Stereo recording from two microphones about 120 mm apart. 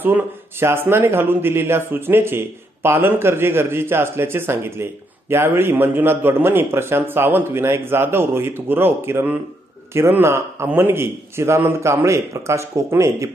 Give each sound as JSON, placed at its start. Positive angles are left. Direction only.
{"t": 0.0, "sound": "a man's voice", "side_deg": -20}